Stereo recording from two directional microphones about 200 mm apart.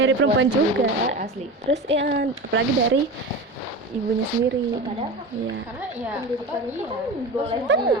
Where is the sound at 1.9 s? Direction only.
55° right (ahead or behind).